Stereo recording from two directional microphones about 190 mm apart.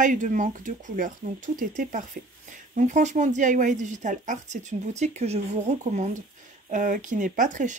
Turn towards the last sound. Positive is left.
turn(degrees=-40)  # may be behind; listen again after turning